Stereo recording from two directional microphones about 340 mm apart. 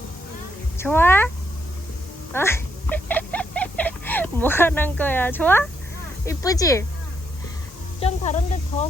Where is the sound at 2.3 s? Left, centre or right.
Centre.